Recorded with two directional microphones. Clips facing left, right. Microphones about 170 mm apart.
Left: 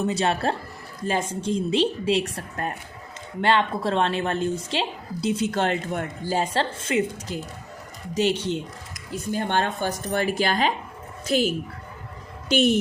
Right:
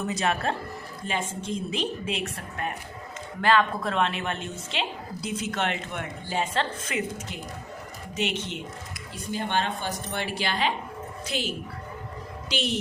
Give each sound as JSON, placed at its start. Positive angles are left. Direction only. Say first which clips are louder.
{"t": 0.1, "sound": "a woman's voice", "louder": "left 3 dB", "side_deg": 30}
{"t": 3.4, "sound": "a woman's voice", "louder": "left 1 dB", "side_deg": 25}
{"t": 9.3, "sound": "speech", "louder": "left 3 dB", "side_deg": 50}
{"t": 12.5, "sound": "speech", "louder": "left 9 dB", "side_deg": 50}